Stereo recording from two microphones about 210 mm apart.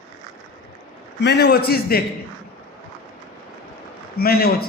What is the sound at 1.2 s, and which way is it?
Speech, 55° left (ahead or behind).